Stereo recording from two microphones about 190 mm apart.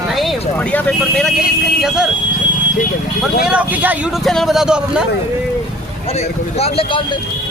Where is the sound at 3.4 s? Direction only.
5° right (ahead or behind).